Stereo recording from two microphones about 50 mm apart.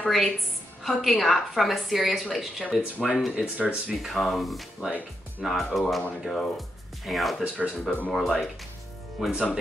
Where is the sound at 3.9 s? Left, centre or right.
Centre.